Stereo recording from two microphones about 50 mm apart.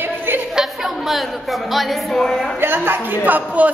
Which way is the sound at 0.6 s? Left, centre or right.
Centre.